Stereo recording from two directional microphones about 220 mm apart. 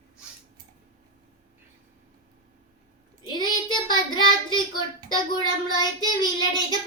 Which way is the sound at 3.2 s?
20° left (ahead or behind).